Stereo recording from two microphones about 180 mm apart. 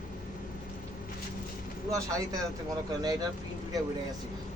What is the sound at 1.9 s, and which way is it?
Speech, 20° right (ahead or behind).